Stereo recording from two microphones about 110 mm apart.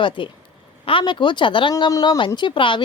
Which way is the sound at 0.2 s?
50° left (ahead or behind).